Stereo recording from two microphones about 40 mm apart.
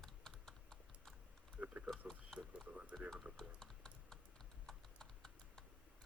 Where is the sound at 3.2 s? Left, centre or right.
Right.